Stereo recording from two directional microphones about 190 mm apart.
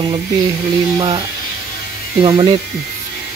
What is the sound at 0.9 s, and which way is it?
Speech, 25° right (ahead or behind).